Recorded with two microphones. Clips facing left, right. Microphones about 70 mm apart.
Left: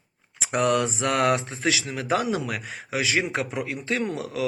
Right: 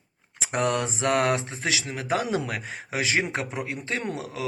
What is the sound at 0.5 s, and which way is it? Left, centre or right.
Speech, right.